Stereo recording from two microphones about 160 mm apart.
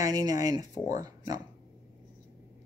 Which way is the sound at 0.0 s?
25° right (ahead or behind).